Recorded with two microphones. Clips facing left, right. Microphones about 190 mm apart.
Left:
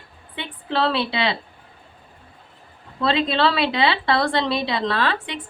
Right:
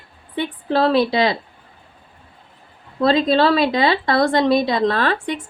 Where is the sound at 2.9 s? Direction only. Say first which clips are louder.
Right 5 dB; 40° right (ahead or behind).